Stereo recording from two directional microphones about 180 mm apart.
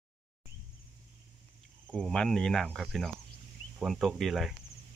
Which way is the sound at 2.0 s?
Centre (ahead or behind).